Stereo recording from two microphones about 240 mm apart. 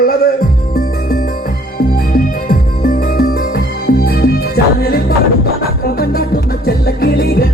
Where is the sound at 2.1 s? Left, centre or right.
Left.